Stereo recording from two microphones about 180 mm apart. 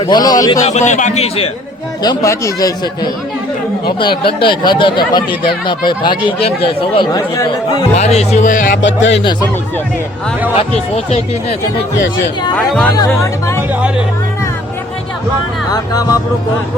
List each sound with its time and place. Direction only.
0.0 s speech: 25° left (ahead or behind)
0.6 s speech: 40° left (ahead or behind)
2.0 s speech: 15° left (ahead or behind); by 8.8 s 45° left (ahead or behind)
8.8 s music: 90° left
10.5 s speech: 35° left (ahead or behind)
12.5 s speech: 5° left (ahead or behind)
15.7 s speech: 20° left (ahead or behind)